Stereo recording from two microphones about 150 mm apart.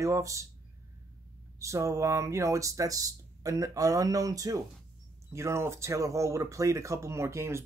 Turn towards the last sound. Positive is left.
turn(degrees=-20)  # may be behind; listen again after turning